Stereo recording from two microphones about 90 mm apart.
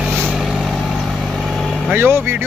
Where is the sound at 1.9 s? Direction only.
25° right (ahead or behind).